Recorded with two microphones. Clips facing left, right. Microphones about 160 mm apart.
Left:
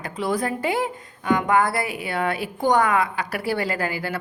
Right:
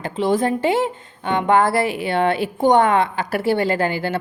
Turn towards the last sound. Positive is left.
turn(degrees=-25)  # may be behind; listen again after turning